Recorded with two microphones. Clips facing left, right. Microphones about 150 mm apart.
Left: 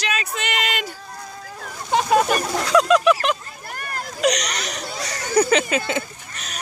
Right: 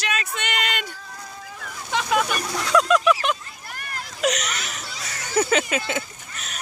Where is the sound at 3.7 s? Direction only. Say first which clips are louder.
Left 5 dB; 45° left (ahead or behind).